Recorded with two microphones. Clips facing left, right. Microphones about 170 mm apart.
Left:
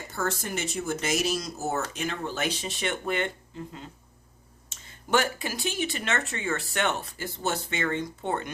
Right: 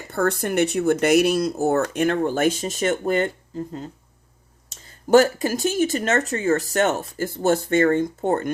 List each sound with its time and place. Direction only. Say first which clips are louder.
0.1 s speech: right 9 dB; 60° right (ahead or behind)